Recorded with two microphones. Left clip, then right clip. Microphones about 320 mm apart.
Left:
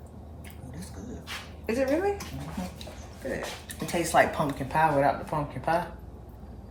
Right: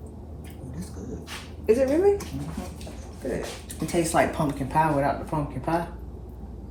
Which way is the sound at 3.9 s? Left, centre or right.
Left.